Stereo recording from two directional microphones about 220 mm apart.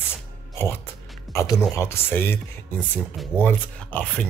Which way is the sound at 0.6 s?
10° left (ahead or behind).